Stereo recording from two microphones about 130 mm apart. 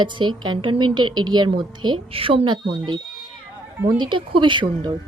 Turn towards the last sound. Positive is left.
turn(degrees=-40)  # may be behind; listen again after turning